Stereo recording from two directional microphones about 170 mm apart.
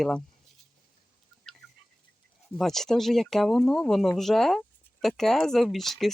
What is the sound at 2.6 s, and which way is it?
Speech, centre (ahead or behind).